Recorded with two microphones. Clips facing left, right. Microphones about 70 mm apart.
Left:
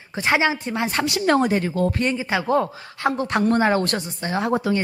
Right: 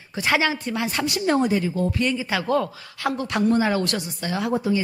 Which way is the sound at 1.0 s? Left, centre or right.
Left.